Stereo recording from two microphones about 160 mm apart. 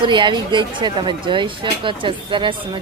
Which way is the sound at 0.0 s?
30° right (ahead or behind).